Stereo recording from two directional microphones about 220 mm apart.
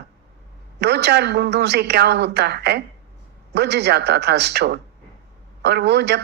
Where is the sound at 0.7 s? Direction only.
50° right (ahead or behind).